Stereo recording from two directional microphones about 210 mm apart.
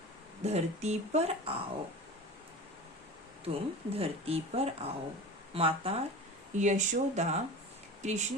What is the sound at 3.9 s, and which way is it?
Speech, 30° right (ahead or behind).